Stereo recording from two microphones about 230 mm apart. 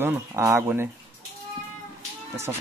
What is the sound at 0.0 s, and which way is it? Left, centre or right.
Speech, centre.